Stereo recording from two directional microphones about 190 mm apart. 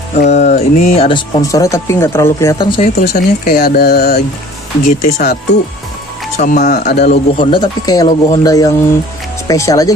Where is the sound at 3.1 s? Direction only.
50° left (ahead or behind).